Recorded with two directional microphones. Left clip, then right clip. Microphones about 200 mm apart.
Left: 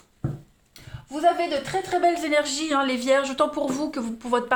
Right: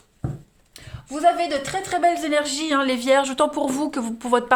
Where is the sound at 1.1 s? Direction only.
45° right (ahead or behind).